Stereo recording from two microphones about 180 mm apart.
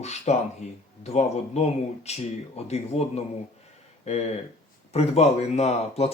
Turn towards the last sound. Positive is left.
turn(degrees=35)  # may be behind; listen again after turning